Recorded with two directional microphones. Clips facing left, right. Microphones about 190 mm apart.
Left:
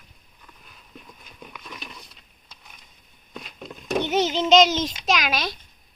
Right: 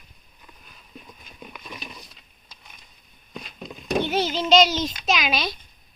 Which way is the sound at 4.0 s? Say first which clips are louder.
Left 2 dB; 20° left (ahead or behind).